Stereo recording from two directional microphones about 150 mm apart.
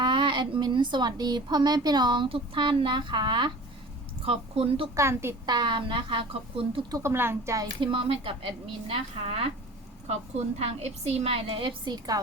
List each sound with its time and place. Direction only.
0.0 s speech: 30° right (ahead or behind)
4.9 s speech: 20° right (ahead or behind); by 6.8 s 35° right (ahead or behind)
6.9 s speech: 15° right (ahead or behind)
7.8 s speech: 35° right (ahead or behind)